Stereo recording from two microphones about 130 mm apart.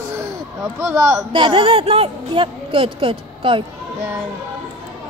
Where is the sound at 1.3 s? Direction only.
40° right (ahead or behind).